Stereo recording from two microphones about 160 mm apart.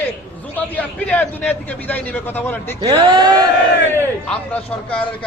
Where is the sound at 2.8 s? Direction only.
25° right (ahead or behind).